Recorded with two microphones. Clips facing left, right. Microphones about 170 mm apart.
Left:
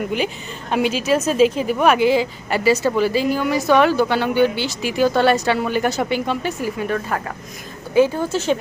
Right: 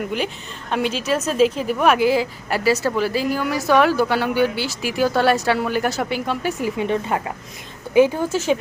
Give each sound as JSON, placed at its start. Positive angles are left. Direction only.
{"t": 0.7, "sound": "a woman's voice", "side_deg": 5}
{"t": 6.6, "sound": "speech", "side_deg": -20}